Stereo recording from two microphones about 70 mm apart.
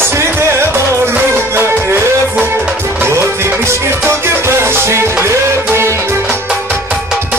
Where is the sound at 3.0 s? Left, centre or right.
Right.